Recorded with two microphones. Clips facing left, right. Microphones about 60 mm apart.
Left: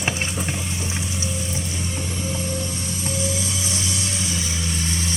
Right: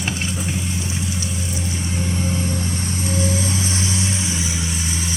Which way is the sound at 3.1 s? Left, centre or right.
Right.